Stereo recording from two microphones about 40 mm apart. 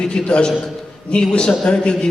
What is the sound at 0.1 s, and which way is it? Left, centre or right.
A man's voice, left.